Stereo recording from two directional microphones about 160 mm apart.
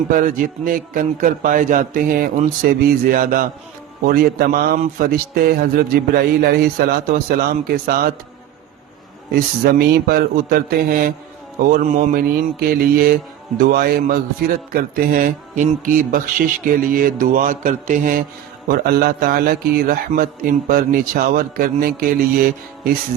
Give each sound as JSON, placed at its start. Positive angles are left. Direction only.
{"t": 0.1, "sound": "a man's voice", "side_deg": -60}
{"t": 2.6, "sound": "a man's voice", "side_deg": -70}
{"t": 4.0, "sound": "a man's voice", "side_deg": -70}
{"t": 9.3, "sound": "a man's voice", "side_deg": -85}
{"t": 18.7, "sound": "a man's voice", "side_deg": -70}